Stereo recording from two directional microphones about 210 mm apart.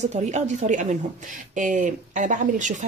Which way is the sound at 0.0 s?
35° right (ahead or behind).